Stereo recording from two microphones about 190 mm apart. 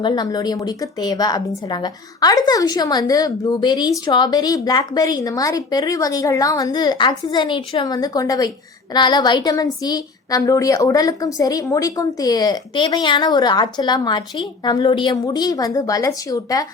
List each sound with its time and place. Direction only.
0.0 s a woman's voice: 20° left (ahead or behind)